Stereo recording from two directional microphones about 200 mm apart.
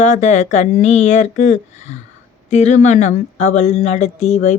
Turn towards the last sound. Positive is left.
turn(degrees=35)  # may be behind; listen again after turning